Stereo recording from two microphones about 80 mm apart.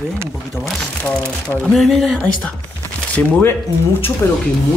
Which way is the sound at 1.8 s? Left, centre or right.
Centre.